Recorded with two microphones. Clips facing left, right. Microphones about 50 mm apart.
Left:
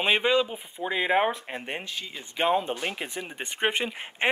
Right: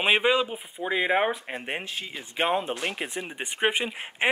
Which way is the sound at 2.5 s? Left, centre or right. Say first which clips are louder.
Left 1 dB; centre.